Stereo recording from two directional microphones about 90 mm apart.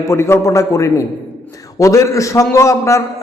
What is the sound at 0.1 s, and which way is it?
A man's voice, 30° left (ahead or behind).